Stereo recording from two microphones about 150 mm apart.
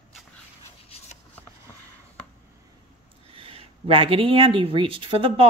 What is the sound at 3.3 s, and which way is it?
A woman's voice, 40° right (ahead or behind).